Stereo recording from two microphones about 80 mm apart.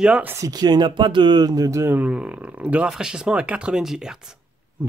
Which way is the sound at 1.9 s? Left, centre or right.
Centre.